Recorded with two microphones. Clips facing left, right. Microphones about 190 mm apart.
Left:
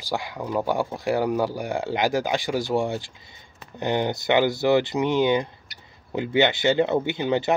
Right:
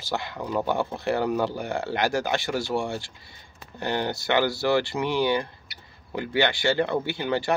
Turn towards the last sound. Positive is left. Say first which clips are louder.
# left 3 dB
turn(degrees=20)  # may be behind; listen again after turning